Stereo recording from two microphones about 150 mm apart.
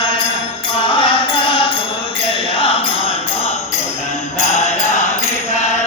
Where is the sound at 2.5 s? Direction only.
35° left (ahead or behind).